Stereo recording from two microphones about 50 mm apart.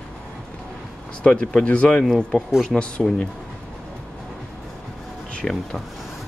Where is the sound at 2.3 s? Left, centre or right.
Centre.